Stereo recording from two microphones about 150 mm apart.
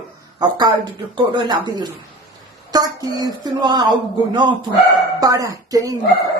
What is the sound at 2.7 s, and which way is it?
Speech, 25° right (ahead or behind).